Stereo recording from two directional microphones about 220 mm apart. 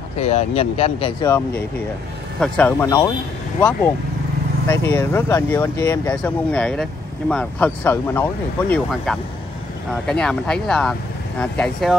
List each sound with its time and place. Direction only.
0.2 s speech: 30° left (ahead or behind)
2.4 s speech: 5° left (ahead or behind)
4.6 s speech: 10° left (ahead or behind)